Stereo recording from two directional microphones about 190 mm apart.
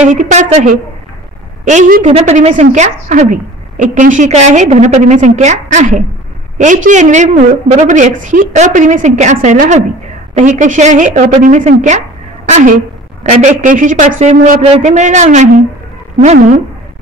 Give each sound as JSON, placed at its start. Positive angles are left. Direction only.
{"t": 0.0, "sound": "a woman's voice", "side_deg": -40}